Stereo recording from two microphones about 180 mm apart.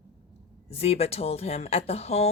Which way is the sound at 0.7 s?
35° left (ahead or behind).